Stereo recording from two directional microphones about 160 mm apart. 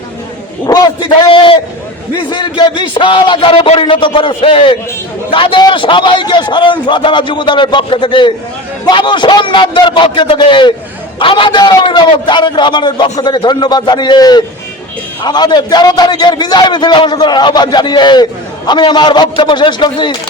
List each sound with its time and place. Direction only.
0.7 s a man's voice: 25° left (ahead or behind)